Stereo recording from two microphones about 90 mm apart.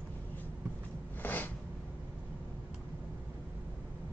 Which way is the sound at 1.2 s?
20° left (ahead or behind).